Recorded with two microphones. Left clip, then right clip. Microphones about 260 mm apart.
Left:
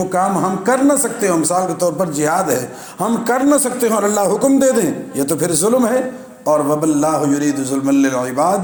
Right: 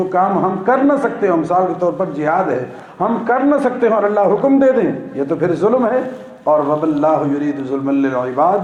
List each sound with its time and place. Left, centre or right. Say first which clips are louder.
0.1 s a man's voice: right 2 dB; left